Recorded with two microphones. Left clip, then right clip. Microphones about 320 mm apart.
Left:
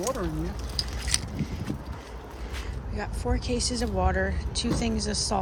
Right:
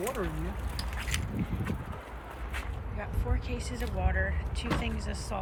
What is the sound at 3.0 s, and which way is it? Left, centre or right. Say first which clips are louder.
Speech: left 7 dB; centre.